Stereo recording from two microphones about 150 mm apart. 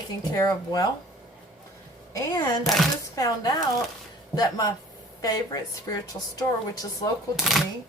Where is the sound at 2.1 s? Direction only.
20° left (ahead or behind).